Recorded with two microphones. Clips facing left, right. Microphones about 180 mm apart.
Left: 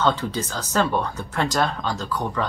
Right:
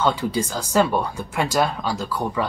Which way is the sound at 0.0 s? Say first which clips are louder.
Right 1 dB; 10° right (ahead or behind).